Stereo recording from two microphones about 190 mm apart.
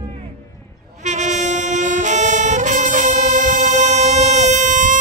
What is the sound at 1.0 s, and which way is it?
Brass instrument, 40° right (ahead or behind).